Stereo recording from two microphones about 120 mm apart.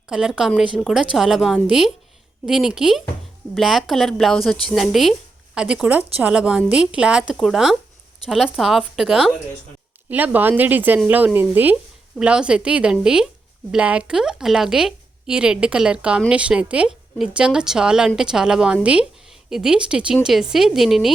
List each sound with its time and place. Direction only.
0.1 s a woman's voice: 5° right (ahead or behind)